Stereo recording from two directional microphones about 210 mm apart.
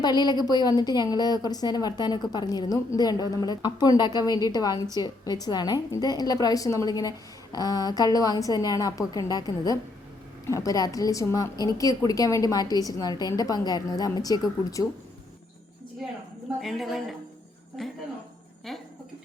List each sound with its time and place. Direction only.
0.0 s a woman's voice: 20° left (ahead or behind)
16.6 s a woman's voice: centre (ahead or behind)